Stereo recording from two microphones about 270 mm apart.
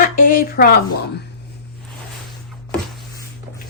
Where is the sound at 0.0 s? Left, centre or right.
Left.